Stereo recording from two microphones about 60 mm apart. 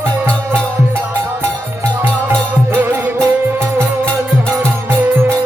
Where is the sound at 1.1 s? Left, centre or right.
Right.